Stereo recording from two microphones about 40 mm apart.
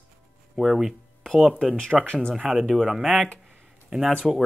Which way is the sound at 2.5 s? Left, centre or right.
Centre.